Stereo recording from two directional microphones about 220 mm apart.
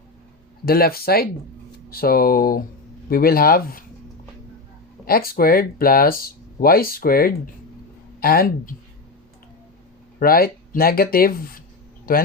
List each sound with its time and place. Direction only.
0.6 s speech: 45° left (ahead or behind)
5.0 s speech: 40° left (ahead or behind)
10.2 s speech: 40° left (ahead or behind)